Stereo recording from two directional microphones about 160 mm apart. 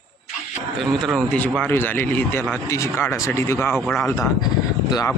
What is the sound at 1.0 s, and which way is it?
Speech, 5° left (ahead or behind).